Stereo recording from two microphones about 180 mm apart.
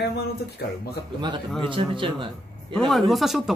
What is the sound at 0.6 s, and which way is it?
Speech, 65° left (ahead or behind).